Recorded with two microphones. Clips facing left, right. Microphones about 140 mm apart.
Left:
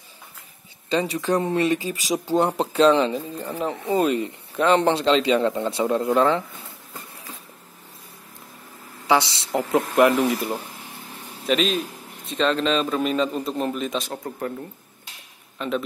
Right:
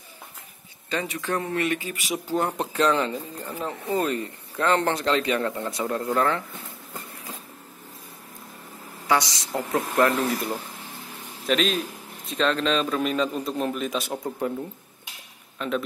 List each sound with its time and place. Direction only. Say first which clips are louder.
0.8 s speech: left 6 dB; 30° left (ahead or behind)
9.0 s speech: left 3 dB; 25° left (ahead or behind)
11.4 s a man's voice: left 2 dB; centre (ahead or behind)
14.0 s speech: right 2 dB; 15° right (ahead or behind)
15.6 s a man's voice: left 1 dB; centre (ahead or behind)